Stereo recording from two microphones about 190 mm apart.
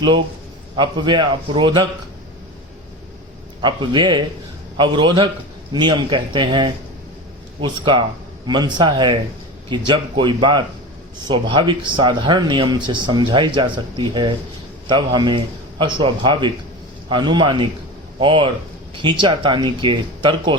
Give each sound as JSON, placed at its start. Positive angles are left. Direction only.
{"t": 0.8, "sound": "speech", "side_deg": -25}
{"t": 3.6, "sound": "speech", "side_deg": -25}